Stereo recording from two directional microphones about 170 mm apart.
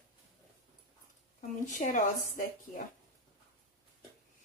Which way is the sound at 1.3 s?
50° left (ahead or behind).